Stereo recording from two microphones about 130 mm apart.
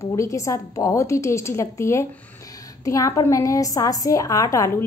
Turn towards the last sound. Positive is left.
turn(degrees=25)  # may be behind; listen again after turning